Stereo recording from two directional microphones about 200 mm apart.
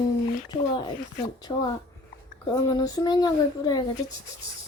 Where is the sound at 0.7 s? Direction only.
20° left (ahead or behind).